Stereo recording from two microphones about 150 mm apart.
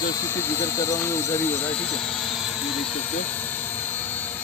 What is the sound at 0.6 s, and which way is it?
Speech, 20° left (ahead or behind).